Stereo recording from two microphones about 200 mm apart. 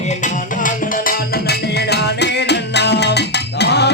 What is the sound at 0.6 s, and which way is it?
Music, 45° left (ahead or behind).